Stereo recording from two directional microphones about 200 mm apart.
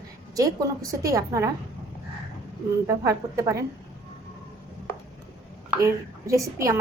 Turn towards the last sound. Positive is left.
turn(degrees=-15)  # may be behind; listen again after turning